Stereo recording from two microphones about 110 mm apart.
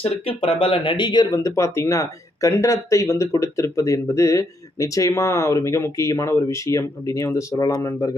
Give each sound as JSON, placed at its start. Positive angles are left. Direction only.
{"t": 0.0, "sound": "speech", "side_deg": 55}